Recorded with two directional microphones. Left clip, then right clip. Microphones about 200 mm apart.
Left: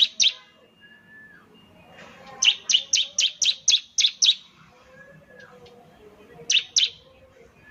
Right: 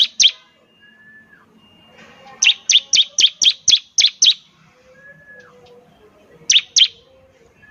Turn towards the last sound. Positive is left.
turn(degrees=-40)  # may be behind; listen again after turning